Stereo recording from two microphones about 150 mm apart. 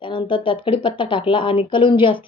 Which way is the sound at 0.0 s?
35° left (ahead or behind).